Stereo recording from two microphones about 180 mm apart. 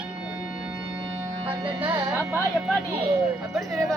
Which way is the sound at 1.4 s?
25° right (ahead or behind).